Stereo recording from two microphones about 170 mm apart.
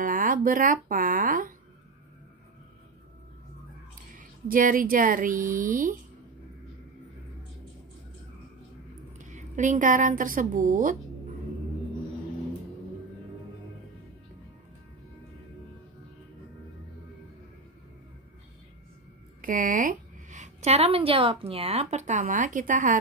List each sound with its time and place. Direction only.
0.0 s speech: 55° right (ahead or behind)
4.1 s speech: 50° right (ahead or behind)
9.2 s a woman's voice: 45° right (ahead or behind)
19.4 s a woman's voice: 50° right (ahead or behind)